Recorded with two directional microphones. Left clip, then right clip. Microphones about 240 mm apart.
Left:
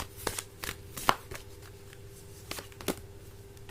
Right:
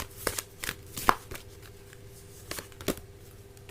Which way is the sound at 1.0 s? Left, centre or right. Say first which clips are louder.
Right 3 dB; centre.